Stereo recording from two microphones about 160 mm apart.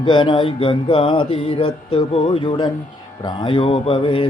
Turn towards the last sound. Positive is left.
turn(degrees=35)  # may be behind; listen again after turning